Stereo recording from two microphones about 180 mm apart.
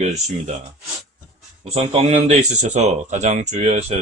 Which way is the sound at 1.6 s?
35° right (ahead or behind).